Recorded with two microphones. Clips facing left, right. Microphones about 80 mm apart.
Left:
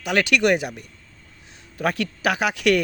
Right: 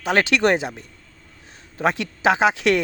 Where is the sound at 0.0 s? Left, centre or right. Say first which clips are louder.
Right 1 dB; right.